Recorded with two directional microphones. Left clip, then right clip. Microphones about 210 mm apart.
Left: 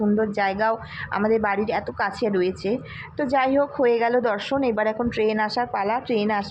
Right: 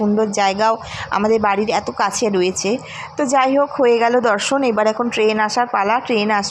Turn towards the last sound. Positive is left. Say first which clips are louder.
# right 6 dB
turn(degrees=-20)  # may be behind; listen again after turning